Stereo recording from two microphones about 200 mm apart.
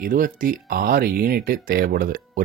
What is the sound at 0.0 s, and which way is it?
Speech, 45° right (ahead or behind).